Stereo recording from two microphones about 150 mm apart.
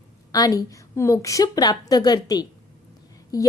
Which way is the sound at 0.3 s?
25° left (ahead or behind).